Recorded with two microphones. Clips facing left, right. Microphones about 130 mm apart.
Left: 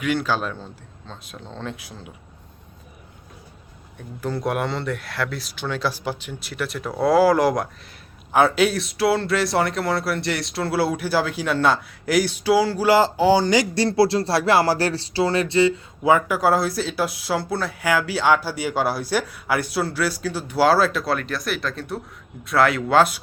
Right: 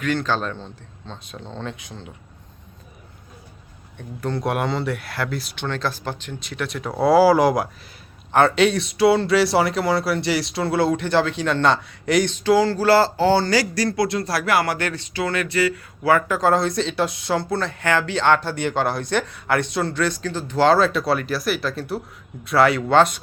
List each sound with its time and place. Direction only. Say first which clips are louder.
0.0 s speech: even; 10° left (ahead or behind)
3.9 s speech: right 1 dB; 5° left (ahead or behind)